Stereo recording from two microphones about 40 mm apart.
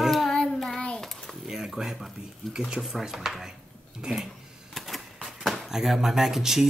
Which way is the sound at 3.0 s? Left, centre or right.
Centre.